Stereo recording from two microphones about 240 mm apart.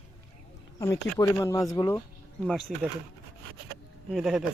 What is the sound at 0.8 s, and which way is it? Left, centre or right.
Speech, centre.